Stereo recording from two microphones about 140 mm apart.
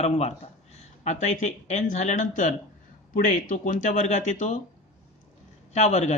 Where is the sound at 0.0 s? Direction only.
50° left (ahead or behind).